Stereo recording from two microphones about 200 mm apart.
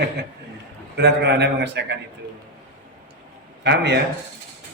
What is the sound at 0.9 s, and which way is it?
Speech, 60° right (ahead or behind).